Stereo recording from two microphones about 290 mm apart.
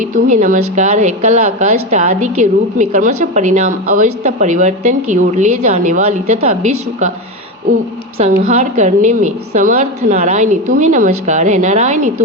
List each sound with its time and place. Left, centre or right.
0.0 s a woman's voice: right
8.2 s a woman's voice: right